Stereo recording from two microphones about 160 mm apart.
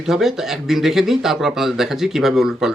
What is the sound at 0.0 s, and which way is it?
Speech, centre (ahead or behind).